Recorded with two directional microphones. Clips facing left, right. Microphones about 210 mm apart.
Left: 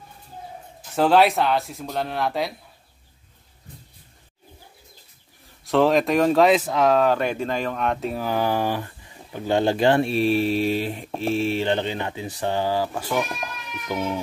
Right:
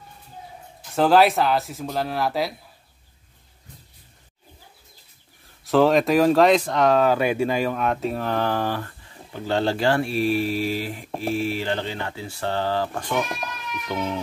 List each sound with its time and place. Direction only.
0.9 s speech: centre (ahead or behind)
5.7 s speech: centre (ahead or behind)